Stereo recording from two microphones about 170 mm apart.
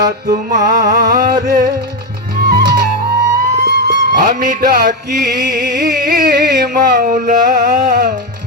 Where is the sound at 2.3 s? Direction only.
70° right (ahead or behind).